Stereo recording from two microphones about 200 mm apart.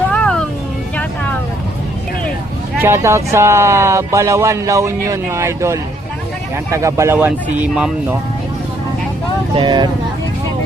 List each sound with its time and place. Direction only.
0.1 s a sound: 5° left (ahead or behind)
2.8 s speech: 15° right (ahead or behind)
9.6 s speech: 20° right (ahead or behind)